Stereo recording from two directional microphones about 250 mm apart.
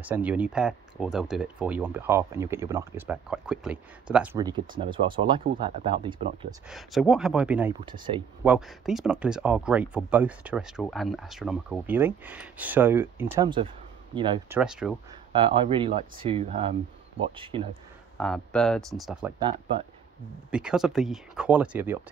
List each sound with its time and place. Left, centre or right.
0.0 s speech: centre
6.7 s speech: centre
7.8 s speech: centre
8.5 s speech: centre
13.3 s speech: centre
14.5 s speech: centre
15.3 s speech: centre
18.1 s speech: centre
20.5 s speech: centre